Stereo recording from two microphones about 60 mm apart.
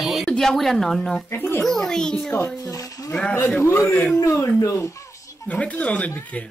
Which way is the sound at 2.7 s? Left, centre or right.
Left.